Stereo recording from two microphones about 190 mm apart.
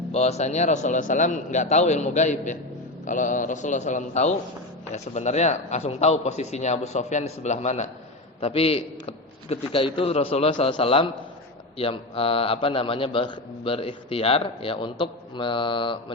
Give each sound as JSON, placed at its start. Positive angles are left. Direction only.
{"t": 0.1, "sound": "a man's voice", "side_deg": 35}